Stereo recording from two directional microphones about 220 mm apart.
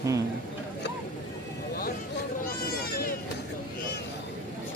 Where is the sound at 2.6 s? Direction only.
45° left (ahead or behind).